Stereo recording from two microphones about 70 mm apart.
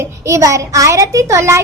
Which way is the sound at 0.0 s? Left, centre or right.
Right.